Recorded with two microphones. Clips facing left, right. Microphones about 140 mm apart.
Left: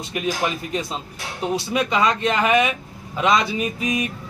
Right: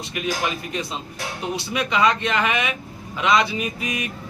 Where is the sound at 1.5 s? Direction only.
40° left (ahead or behind).